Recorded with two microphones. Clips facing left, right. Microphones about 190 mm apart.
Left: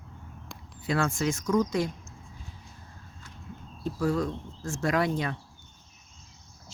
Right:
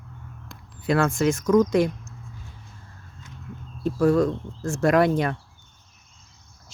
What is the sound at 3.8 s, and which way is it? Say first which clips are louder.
Speech: right 8 dB; 65° right (ahead or behind).